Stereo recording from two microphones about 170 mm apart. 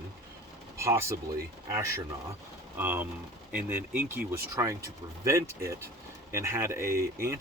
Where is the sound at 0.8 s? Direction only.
15° right (ahead or behind).